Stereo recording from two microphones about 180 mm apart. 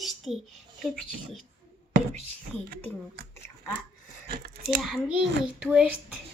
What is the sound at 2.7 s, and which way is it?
Speech, 55° right (ahead or behind).